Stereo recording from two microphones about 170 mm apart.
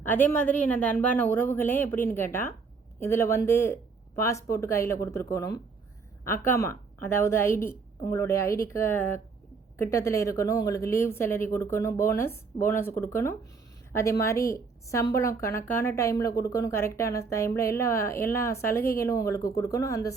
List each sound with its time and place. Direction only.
0.0 s a woman's voice: 10° left (ahead or behind)